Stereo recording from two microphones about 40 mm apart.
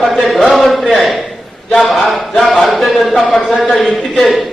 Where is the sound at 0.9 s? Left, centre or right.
Centre.